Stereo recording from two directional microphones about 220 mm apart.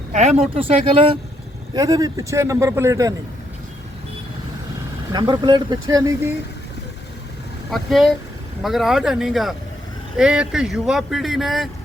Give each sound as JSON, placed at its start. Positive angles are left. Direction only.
{"t": 0.1, "sound": "a man's voice", "side_deg": -30}
{"t": 5.1, "sound": "speech", "side_deg": -20}
{"t": 7.7, "sound": "speech", "side_deg": 0}